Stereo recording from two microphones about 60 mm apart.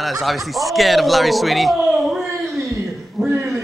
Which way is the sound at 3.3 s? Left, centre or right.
Right.